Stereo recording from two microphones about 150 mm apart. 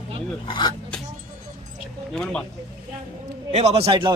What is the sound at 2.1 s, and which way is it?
Speech, 5° left (ahead or behind).